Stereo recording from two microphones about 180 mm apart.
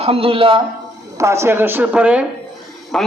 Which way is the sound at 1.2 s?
15° right (ahead or behind).